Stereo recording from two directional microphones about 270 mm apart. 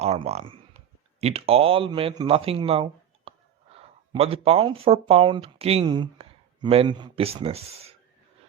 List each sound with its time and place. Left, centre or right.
0.0 s a man's voice: right